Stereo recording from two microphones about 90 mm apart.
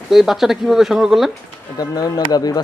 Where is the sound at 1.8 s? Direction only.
45° left (ahead or behind).